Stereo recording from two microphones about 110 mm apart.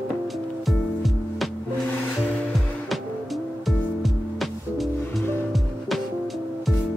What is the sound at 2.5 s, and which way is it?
Music, centre (ahead or behind).